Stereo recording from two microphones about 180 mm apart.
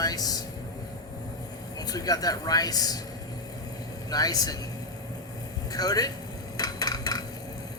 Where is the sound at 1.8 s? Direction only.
20° left (ahead or behind).